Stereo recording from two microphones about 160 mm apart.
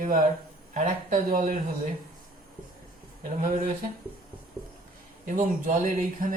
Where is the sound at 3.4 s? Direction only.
55° right (ahead or behind).